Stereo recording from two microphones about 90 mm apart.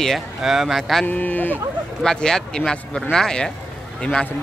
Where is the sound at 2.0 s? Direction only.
5° left (ahead or behind).